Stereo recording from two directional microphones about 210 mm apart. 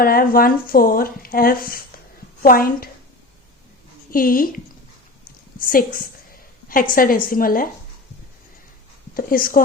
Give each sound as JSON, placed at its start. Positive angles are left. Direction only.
{"t": 0.0, "sound": "a woman's voice", "side_deg": 45}
{"t": 4.1, "sound": "a woman's voice", "side_deg": 45}
{"t": 5.5, "sound": "a sound", "side_deg": 40}
{"t": 6.9, "sound": "a woman's voice", "side_deg": 45}
{"t": 9.1, "sound": "a woman's voice", "side_deg": 45}